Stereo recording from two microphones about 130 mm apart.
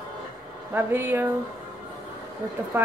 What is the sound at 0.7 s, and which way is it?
Speech, 15° right (ahead or behind).